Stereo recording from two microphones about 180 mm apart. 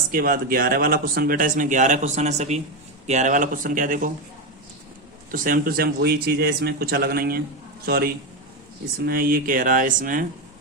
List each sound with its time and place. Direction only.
0.1 s speech: 50° right (ahead or behind)
5.3 s a man's voice: 50° right (ahead or behind)